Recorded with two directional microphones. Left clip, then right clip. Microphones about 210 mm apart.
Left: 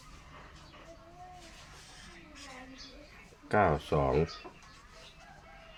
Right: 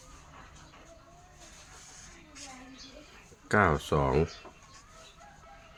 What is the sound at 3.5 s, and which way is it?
Speech, 35° right (ahead or behind).